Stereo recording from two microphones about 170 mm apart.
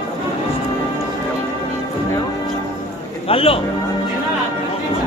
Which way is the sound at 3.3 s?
35° left (ahead or behind).